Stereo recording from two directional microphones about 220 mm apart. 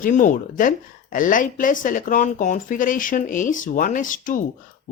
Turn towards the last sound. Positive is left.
turn(degrees=35)  # may be behind; listen again after turning